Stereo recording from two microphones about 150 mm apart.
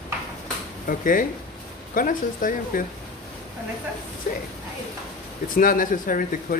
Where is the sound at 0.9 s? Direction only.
65° left (ahead or behind).